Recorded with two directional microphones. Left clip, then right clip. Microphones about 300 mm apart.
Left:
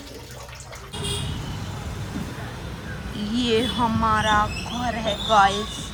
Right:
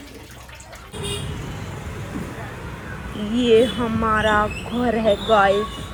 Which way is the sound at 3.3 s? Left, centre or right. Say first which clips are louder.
Right 7 dB; left.